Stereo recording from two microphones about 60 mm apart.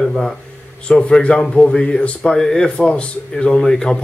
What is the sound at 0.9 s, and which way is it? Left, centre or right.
A man's voice, centre.